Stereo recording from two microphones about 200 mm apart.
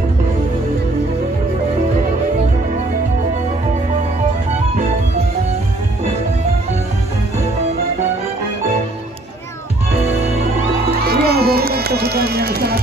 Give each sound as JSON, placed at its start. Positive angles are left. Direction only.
{"t": 11.1, "sound": "run", "side_deg": -50}